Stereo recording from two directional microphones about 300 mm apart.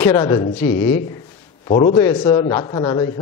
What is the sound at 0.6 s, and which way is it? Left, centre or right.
Speech, left.